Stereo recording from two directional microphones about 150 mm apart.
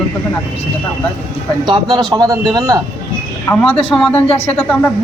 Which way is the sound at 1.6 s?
30° right (ahead or behind).